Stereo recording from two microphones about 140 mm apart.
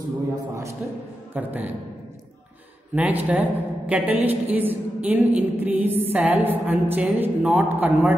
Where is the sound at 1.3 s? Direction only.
10° right (ahead or behind).